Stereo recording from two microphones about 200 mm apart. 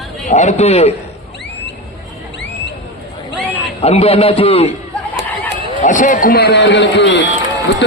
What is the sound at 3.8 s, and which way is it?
Speech, 30° left (ahead or behind).